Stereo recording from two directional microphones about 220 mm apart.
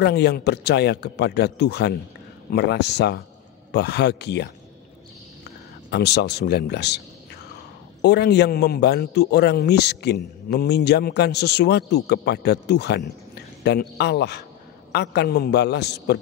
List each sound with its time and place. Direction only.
0.0 s a man's voice: 50° left (ahead or behind)
8.0 s a man's voice: 50° left (ahead or behind)